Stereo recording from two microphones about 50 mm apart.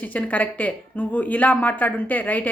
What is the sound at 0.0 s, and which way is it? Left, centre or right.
A woman's voice, left.